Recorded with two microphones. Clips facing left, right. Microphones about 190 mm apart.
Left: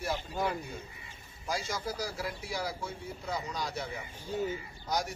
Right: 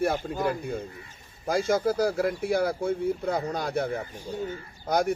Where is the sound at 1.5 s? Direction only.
55° right (ahead or behind).